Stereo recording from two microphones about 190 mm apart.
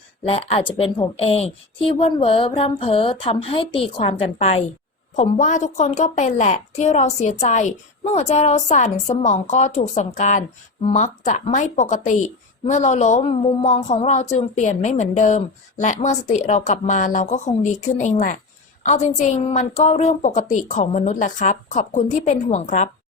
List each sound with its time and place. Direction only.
0.3 s a woman's voice: 30° left (ahead or behind)